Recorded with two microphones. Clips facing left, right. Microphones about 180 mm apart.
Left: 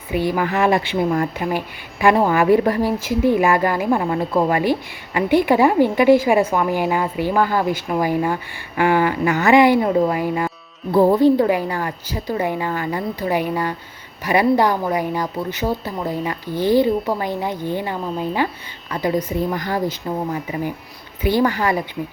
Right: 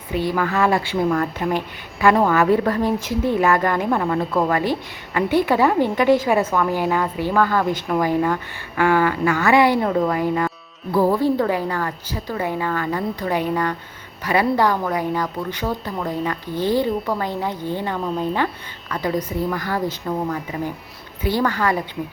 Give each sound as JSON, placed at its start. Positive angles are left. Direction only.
{"t": 0.1, "sound": "speech", "side_deg": 15}
{"t": 10.9, "sound": "speech", "side_deg": 20}
{"t": 19.0, "sound": "speech", "side_deg": 15}